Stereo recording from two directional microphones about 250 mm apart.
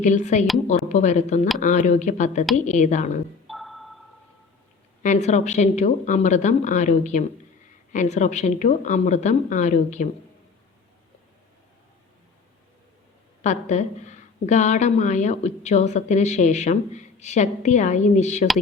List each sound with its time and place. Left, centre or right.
0.0 s a woman's voice: left
3.4 s music: centre
5.0 s a woman's voice: left
13.4 s a woman's voice: left